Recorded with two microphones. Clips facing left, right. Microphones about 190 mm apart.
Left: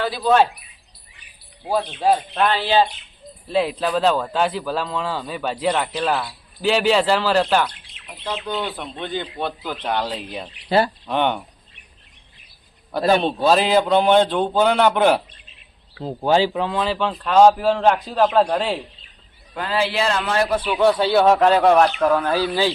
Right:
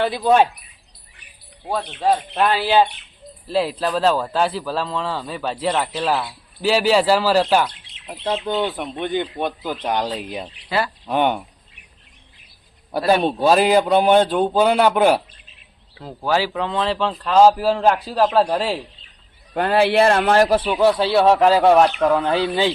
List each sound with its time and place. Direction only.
0.0 s speech: 15° right (ahead or behind)
1.6 s speech: 5° left (ahead or behind)
2.3 s speech: 10° right (ahead or behind)
7.7 s speech: 25° right (ahead or behind)
10.7 s speech: 30° left (ahead or behind)
11.0 s a sound: 10° right (ahead or behind)
13.1 s speech: 10° right (ahead or behind)
16.0 s speech: 25° left (ahead or behind); by 18.8 s 5° right (ahead or behind)
19.5 s speech: 55° right (ahead or behind)
20.7 s speech: centre (ahead or behind)
22.0 s speech: 20° right (ahead or behind)